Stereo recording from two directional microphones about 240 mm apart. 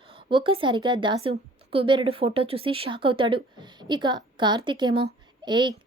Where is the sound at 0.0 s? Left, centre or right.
Right.